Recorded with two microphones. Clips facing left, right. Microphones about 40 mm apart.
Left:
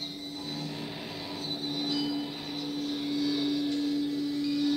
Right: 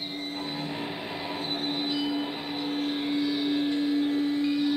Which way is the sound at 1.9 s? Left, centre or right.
Right.